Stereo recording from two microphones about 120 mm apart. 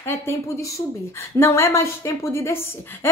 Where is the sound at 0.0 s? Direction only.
25° left (ahead or behind).